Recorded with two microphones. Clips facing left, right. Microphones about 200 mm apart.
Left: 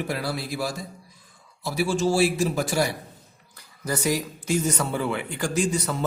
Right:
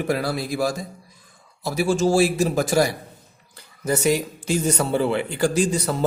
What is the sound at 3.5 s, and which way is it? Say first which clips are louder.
Speech: right 5 dB; 25° right (ahead or behind).